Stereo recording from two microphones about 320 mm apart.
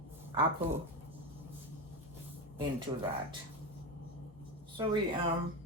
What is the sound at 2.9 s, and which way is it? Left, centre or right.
Speech, centre.